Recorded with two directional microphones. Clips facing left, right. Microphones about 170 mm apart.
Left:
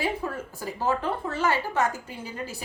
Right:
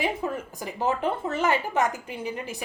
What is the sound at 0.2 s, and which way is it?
A woman's voice, 20° right (ahead or behind).